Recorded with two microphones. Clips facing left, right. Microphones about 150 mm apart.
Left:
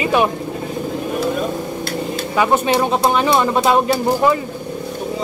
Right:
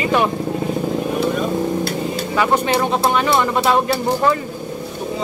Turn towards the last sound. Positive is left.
turn(degrees=20)  # may be behind; listen again after turning